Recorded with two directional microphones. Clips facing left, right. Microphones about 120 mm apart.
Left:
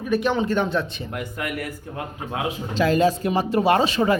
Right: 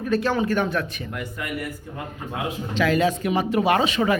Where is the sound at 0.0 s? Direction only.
15° left (ahead or behind).